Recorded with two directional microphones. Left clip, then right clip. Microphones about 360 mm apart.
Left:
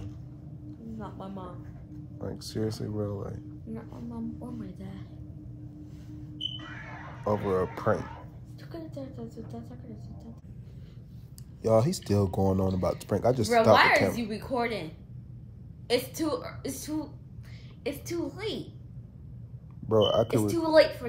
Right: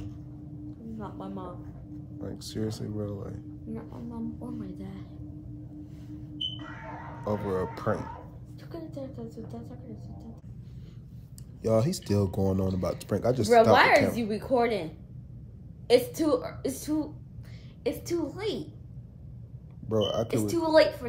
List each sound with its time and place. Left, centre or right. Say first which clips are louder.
0.9 s a woman's voice: right 1 dB; centre
2.1 s speech: left 2 dB; centre
3.7 s a woman's voice: right 1 dB; centre
7.2 s speech: left 3 dB; centre
8.7 s a woman's voice: right 1 dB; centre
11.6 s speech: left 2 dB; centre
14.1 s a woman's voice: right 5 dB; right
15.9 s a woman's voice: right 5 dB; right
19.9 s speech: left 4 dB; centre
20.4 s a woman's voice: right 2 dB; centre